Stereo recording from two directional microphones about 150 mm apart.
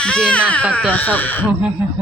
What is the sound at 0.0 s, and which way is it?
Music, 5° left (ahead or behind).